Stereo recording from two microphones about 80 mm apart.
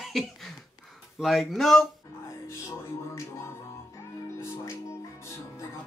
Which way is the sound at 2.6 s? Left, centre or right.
Left.